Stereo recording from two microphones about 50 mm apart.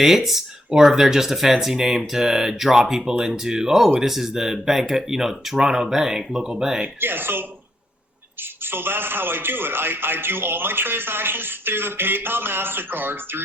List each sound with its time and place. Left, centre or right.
0.0 s speech: centre
7.0 s a man's voice: right
8.6 s a man's voice: right